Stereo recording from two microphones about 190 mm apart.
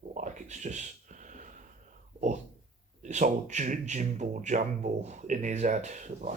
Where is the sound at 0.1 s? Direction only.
40° right (ahead or behind).